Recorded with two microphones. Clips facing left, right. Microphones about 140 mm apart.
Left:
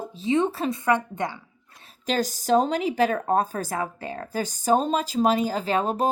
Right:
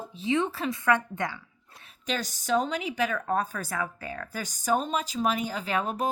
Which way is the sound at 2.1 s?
40° left (ahead or behind).